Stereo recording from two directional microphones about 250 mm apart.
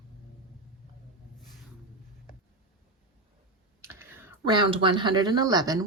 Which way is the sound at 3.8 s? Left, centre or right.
Centre.